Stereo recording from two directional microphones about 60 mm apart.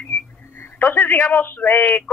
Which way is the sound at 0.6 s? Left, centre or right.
Left.